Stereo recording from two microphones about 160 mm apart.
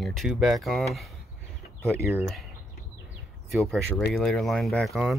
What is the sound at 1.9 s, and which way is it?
Speech, 15° right (ahead or behind).